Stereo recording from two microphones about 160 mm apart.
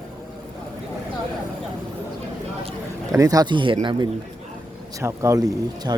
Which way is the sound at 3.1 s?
20° right (ahead or behind).